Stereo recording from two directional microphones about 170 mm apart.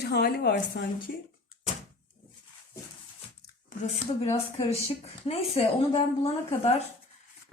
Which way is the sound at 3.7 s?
40° left (ahead or behind).